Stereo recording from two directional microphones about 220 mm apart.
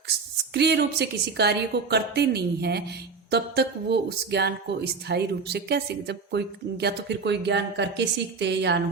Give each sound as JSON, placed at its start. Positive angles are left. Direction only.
{"t": 0.5, "sound": "speech", "side_deg": -50}